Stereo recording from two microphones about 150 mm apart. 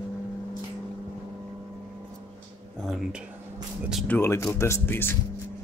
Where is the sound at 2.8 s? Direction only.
Centre (ahead or behind).